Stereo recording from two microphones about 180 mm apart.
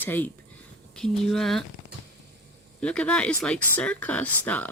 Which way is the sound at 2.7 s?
5° left (ahead or behind).